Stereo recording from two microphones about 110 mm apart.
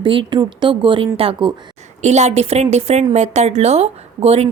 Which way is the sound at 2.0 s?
90° right.